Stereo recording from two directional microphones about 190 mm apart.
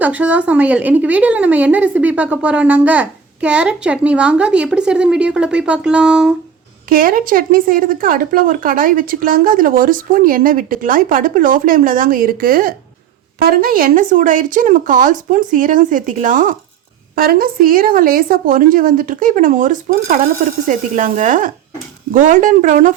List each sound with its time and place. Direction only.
0.0 s a woman's voice: 10° right (ahead or behind)
6.8 s speech: 50° right (ahead or behind)